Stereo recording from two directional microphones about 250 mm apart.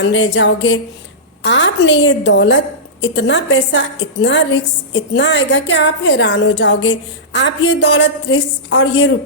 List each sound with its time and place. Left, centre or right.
0.0 s a woman's voice: left